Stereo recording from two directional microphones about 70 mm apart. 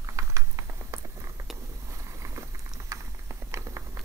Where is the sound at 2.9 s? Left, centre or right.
Right.